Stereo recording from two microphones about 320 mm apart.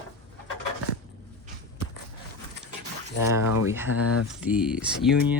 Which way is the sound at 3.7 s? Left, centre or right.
Centre.